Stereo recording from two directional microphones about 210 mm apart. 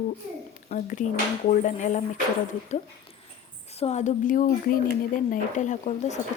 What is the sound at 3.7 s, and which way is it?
A woman's voice, 30° left (ahead or behind).